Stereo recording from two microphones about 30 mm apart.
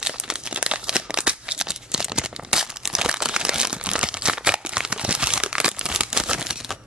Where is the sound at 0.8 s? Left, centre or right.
Right.